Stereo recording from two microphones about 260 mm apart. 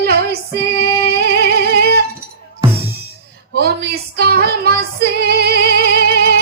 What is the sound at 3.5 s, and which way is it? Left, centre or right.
Female singing, right.